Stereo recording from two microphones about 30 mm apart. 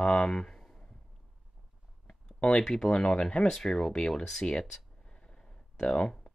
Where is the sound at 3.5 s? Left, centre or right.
Centre.